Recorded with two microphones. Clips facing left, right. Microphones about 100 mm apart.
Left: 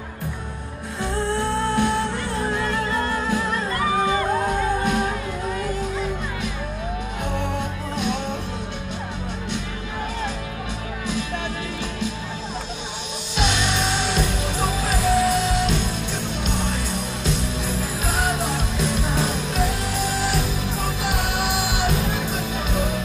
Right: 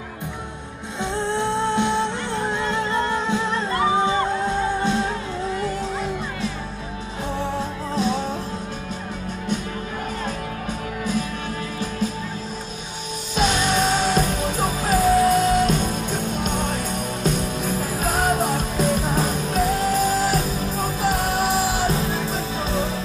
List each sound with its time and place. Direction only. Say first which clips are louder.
1.1 s music: right 1 dB; 20° right (ahead or behind)
7.3 s music: right 2 dB; 35° right (ahead or behind)
13.4 s music: right 3 dB; 40° right (ahead or behind)